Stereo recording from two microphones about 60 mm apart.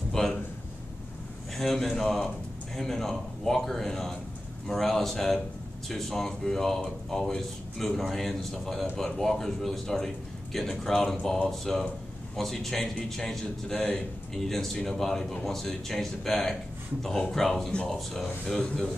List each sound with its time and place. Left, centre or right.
0.1 s a sound: centre
1.6 s speech: centre
13.7 s a man's voice: left
14.3 s speech: centre